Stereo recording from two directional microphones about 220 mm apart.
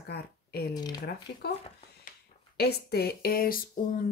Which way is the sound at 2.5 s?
45° left (ahead or behind).